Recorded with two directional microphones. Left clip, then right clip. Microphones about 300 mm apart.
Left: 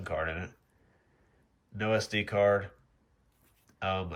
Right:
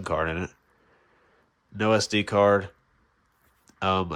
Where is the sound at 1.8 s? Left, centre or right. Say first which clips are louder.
Right 7 dB; centre.